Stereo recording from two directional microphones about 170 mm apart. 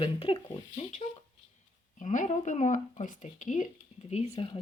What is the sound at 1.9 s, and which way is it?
Speech, 45° left (ahead or behind).